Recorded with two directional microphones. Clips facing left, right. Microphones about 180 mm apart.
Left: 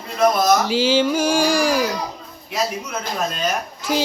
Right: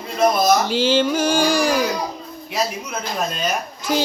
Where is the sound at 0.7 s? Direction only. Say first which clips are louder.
Even; 5° left (ahead or behind).